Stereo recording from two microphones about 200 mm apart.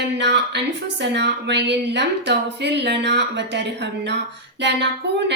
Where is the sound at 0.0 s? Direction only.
60° right (ahead or behind).